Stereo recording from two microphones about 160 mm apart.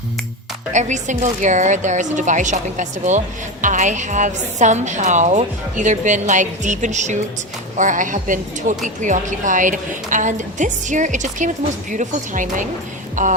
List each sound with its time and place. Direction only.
0.7 s speech: 50° right (ahead or behind)